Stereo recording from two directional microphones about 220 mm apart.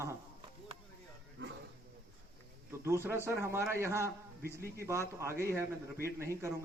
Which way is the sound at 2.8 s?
10° right (ahead or behind).